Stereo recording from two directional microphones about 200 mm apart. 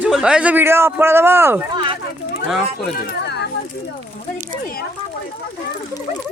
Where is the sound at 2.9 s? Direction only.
55° left (ahead or behind).